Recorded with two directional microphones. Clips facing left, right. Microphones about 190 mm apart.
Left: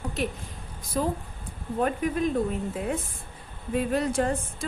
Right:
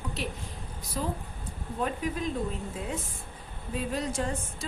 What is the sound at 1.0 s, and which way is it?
A woman's voice, 55° left (ahead or behind).